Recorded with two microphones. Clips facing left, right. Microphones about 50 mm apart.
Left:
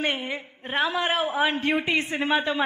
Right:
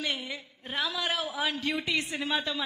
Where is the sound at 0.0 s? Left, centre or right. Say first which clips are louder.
Left 6 dB; left.